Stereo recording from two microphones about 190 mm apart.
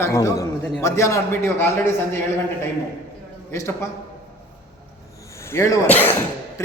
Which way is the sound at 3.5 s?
15° left (ahead or behind).